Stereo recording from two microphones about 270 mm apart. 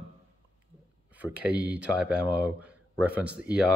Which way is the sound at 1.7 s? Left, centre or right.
Centre.